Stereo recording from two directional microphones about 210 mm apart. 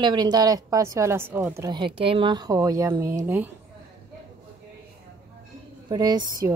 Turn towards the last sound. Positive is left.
turn(degrees=-20)  # may be behind; listen again after turning